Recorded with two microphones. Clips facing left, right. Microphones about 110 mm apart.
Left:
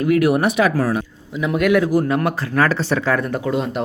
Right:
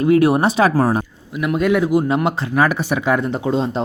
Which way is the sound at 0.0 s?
30° right (ahead or behind).